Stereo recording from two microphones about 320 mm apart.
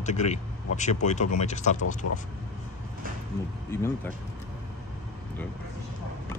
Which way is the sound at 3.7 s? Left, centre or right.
Centre.